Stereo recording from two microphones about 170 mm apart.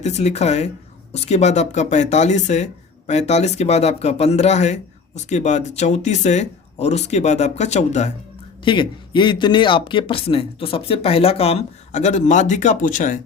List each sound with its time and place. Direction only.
0.0 s speech: 40° left (ahead or behind)
8.6 s speech: 30° left (ahead or behind); by 13.1 s 50° left (ahead or behind)